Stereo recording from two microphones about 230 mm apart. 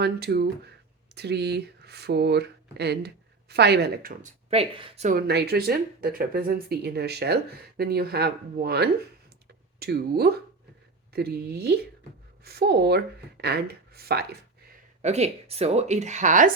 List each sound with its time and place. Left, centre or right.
0.0 s speech: right
15.0 s speech: right